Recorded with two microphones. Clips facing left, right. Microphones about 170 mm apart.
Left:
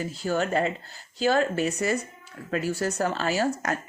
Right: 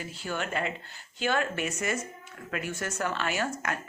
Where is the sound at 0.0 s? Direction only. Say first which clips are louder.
Left 8 dB; 40° left (ahead or behind).